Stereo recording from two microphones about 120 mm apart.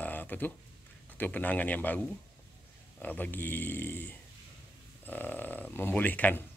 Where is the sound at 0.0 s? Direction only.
15° left (ahead or behind).